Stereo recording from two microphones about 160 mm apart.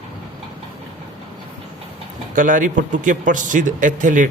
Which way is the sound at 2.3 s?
55° right (ahead or behind).